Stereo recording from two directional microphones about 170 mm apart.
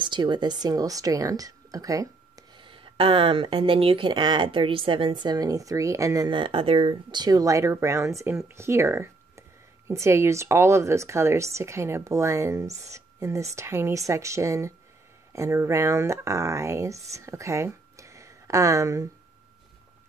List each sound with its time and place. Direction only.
0.0 s speech: 25° right (ahead or behind)